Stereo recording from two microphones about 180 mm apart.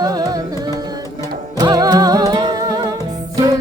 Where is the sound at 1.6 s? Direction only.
20° right (ahead or behind).